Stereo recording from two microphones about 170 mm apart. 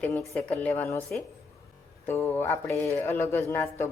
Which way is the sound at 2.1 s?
15° left (ahead or behind).